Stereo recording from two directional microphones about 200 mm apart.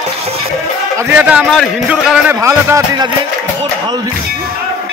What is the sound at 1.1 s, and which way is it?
A man's voice, 5° right (ahead or behind).